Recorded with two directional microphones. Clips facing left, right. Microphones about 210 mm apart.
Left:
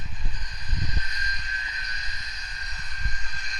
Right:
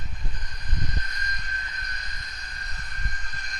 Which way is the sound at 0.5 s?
55° right (ahead or behind).